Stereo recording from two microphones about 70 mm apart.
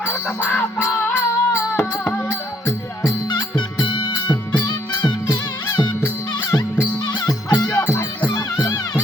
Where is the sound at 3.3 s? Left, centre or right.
Left.